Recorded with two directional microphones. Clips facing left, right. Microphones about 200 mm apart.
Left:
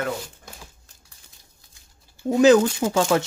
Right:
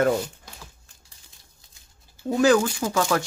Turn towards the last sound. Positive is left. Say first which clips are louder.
# left 3 dB
turn(degrees=25)  # may be behind; listen again after turning